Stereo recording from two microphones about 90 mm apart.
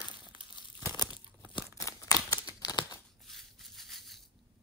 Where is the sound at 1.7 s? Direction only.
40° left (ahead or behind).